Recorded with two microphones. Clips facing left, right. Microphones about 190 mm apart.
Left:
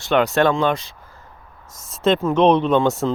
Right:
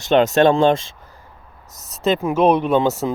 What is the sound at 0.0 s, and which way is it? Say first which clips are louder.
Speech: right 3 dB; 20° right (ahead or behind).